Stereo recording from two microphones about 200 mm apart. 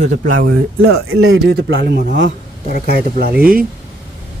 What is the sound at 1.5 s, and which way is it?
A man's voice, 55° right (ahead or behind).